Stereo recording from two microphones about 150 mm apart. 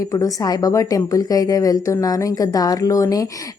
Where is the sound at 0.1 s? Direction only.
25° left (ahead or behind).